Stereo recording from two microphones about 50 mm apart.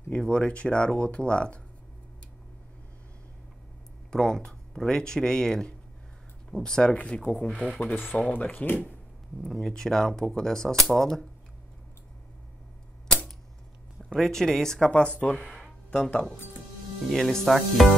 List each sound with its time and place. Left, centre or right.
0.1 s speech: centre
4.1 s speech: centre
7.2 s speech: left
9.4 s speech: centre
14.0 s speech: centre
14.9 s speech: left
17.0 s speech: centre